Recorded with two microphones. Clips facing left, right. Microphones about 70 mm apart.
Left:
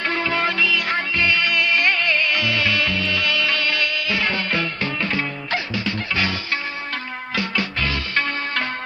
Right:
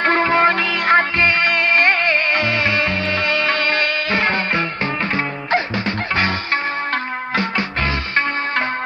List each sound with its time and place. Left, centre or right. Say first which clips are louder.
0.0 s music: right 7 dB; right